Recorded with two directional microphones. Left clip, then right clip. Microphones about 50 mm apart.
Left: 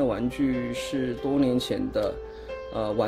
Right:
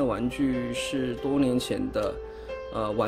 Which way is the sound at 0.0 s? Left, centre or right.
Centre.